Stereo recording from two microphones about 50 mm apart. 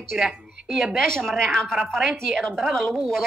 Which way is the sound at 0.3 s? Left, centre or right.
Centre.